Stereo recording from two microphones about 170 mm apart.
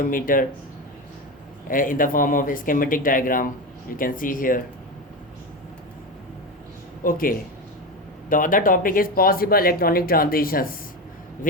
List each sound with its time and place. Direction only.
0.0 s speech: 55° left (ahead or behind)
1.6 s speech: 55° left (ahead or behind)
7.0 s speech: 55° left (ahead or behind)